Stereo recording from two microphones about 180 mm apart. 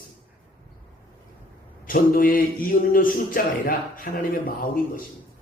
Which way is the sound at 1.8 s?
50° left (ahead or behind).